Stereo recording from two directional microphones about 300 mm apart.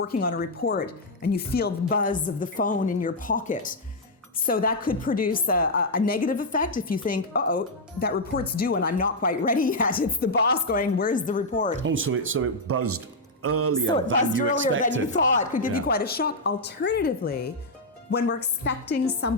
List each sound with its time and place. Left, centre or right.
0.1 s a woman's voice: left
11.8 s speech: right
15.1 s a woman's voice: left